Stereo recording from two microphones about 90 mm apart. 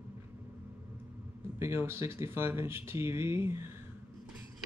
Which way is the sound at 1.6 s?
25° right (ahead or behind).